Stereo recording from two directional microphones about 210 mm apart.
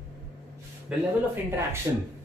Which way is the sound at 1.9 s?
10° right (ahead or behind).